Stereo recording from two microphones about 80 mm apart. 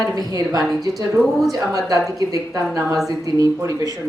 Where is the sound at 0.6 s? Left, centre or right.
Centre.